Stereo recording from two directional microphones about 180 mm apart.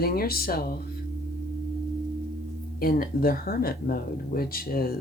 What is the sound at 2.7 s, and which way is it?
Speech, 55° left (ahead or behind).